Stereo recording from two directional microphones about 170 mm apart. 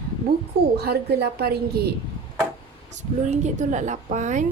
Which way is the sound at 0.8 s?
65° right (ahead or behind).